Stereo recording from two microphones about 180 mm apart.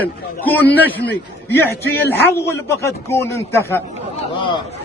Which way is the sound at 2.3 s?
15° left (ahead or behind).